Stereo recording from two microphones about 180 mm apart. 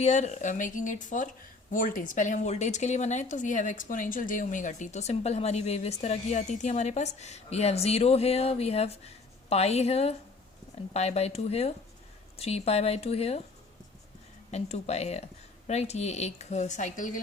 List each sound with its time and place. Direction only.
0.0 s speech: 40° left (ahead or behind)
14.5 s speech: 35° left (ahead or behind)